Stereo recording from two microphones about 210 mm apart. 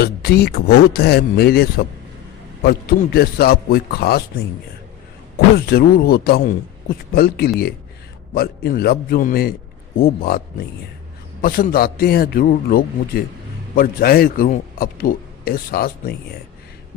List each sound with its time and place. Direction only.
0.0 s a man's voice: 50° left (ahead or behind)
5.7 s a man's voice: 45° left (ahead or behind)